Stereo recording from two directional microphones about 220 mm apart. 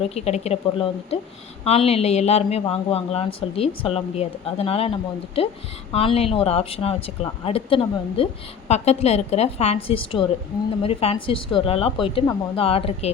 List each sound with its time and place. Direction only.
0.0 s speech: 30° left (ahead or behind)